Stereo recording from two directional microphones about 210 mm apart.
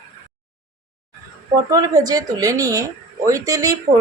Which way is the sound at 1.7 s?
15° right (ahead or behind).